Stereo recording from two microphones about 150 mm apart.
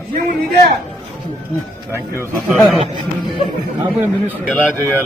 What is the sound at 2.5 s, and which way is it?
Speech, centre (ahead or behind).